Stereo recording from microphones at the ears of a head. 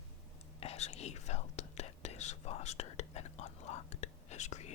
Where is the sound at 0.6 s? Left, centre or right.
Left.